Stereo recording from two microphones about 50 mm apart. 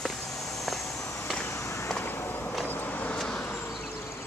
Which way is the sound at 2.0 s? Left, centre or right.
Left.